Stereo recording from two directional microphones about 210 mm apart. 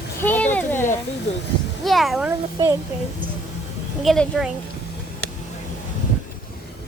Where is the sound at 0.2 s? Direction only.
10° left (ahead or behind).